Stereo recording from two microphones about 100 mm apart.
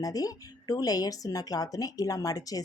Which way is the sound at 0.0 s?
35° left (ahead or behind).